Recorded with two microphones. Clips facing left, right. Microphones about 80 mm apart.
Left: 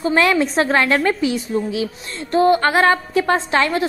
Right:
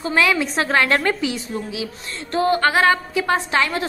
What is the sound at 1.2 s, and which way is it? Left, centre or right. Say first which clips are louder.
Speech: left 5 dB; left.